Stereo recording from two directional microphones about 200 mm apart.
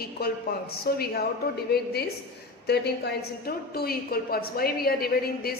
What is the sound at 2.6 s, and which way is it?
A woman's voice, 55° left (ahead or behind).